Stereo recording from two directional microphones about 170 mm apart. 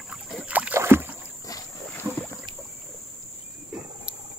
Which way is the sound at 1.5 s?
20° left (ahead or behind).